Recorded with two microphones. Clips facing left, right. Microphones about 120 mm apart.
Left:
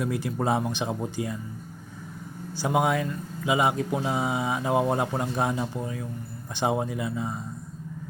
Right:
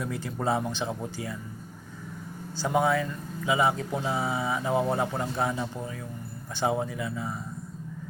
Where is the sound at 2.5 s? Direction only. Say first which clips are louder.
Left 1 dB; 15° left (ahead or behind).